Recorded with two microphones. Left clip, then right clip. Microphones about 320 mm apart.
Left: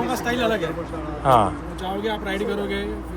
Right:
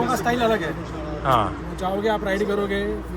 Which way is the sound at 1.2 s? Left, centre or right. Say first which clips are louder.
Left 3 dB; centre.